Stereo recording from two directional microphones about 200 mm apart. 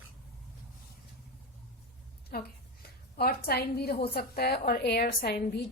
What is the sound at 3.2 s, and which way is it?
A woman's voice, 50° left (ahead or behind).